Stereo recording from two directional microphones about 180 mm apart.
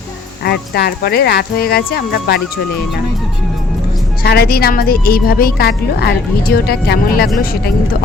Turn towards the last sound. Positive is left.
turn(degrees=55)  # may be behind; listen again after turning